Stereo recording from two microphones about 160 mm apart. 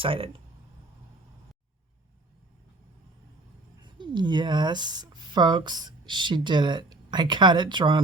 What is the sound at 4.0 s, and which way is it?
Speech, 30° right (ahead or behind).